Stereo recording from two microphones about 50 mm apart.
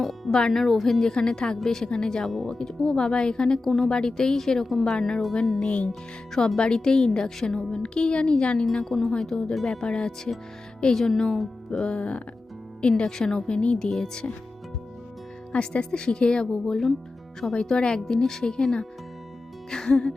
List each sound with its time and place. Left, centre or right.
0.0 s music: centre
0.5 s speech: centre
2.3 s speech: centre
2.6 s speech: centre
3.6 s speech: centre
3.8 s speech: centre
5.6 s speech: left
5.9 s speech: centre
8.7 s speech: centre
11.9 s speech: left
13.0 s speech: centre
15.5 s speech: centre